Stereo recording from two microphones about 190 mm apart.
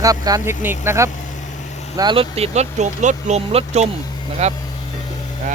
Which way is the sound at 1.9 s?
25° right (ahead or behind).